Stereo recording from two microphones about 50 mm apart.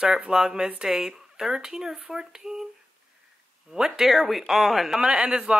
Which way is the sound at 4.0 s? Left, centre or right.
Centre.